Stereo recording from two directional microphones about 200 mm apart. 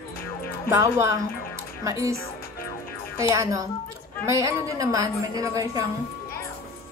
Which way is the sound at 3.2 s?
15° right (ahead or behind).